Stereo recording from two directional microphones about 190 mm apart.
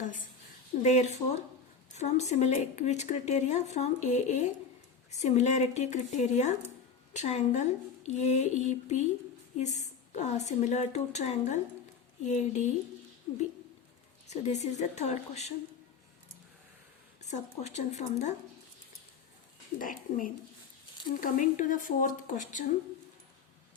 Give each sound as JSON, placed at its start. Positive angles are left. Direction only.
{"t": 0.0, "sound": "a sound", "side_deg": 40}
{"t": 0.8, "sound": "a woman's voice", "side_deg": 35}
{"t": 14.3, "sound": "a woman's voice", "side_deg": 35}
{"t": 17.2, "sound": "a woman's voice", "side_deg": 40}
{"t": 19.8, "sound": "speech", "side_deg": 45}